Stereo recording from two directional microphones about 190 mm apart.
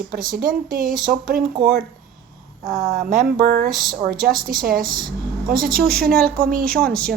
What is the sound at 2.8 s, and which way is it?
Speech, 35° right (ahead or behind).